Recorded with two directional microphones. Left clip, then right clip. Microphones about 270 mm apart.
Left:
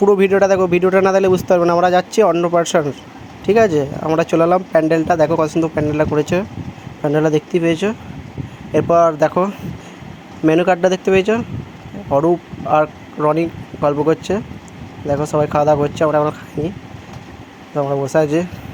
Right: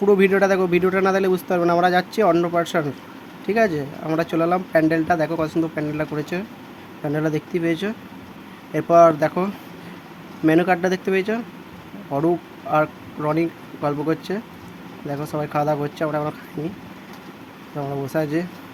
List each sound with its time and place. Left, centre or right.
0.0 s speech: centre
17.7 s speech: centre